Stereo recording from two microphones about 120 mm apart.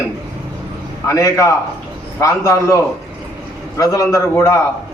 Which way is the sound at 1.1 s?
25° left (ahead or behind).